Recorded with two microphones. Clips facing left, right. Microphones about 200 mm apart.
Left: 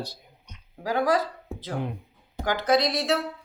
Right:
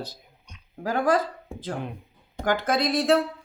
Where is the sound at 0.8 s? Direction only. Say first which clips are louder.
Right 1 dB; 50° right (ahead or behind).